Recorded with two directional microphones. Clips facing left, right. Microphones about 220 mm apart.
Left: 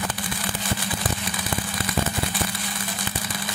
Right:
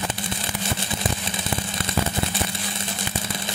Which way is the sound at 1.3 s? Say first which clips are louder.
Even; 25° right (ahead or behind).